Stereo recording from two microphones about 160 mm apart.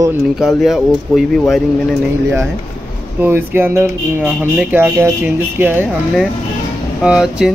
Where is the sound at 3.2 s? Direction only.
15° right (ahead or behind).